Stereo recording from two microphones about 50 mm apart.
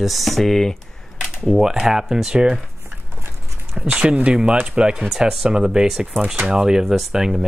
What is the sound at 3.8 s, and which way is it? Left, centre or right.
Speech, right.